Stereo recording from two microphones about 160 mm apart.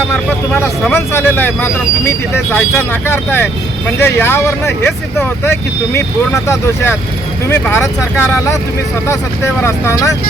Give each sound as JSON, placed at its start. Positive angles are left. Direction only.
{"t": 0.1, "sound": "speech", "side_deg": 10}